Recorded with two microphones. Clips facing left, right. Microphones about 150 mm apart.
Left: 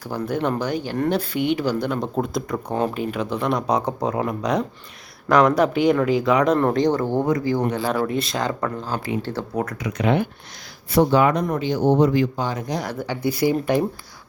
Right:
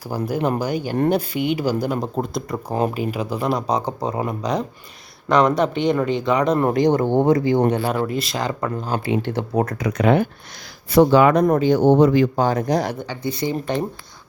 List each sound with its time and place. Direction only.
0.0 s speech: 10° right (ahead or behind)
6.6 s speech: 10° right (ahead or behind)
8.3 s speech: 5° right (ahead or behind)
9.8 s speech: 45° right (ahead or behind)
11.0 s speech: 90° right
11.3 s speech: 45° right (ahead or behind)
11.8 s speech: 65° right (ahead or behind)
12.4 s speech: 45° right (ahead or behind)
13.0 s speech: 10° left (ahead or behind)